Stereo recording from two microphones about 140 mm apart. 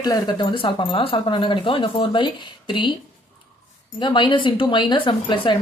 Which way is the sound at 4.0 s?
35° left (ahead or behind).